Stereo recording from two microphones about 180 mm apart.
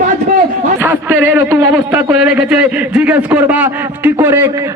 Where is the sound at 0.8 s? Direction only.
10° right (ahead or behind).